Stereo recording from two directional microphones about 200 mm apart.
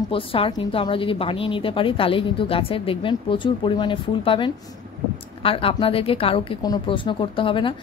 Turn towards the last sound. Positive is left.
turn(degrees=25)  # may be behind; listen again after turning